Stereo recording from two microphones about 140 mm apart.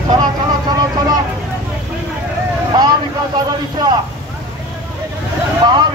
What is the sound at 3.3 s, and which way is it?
Speech, 30° right (ahead or behind).